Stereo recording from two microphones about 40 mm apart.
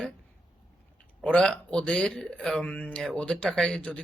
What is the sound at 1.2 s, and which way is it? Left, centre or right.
Speech, left.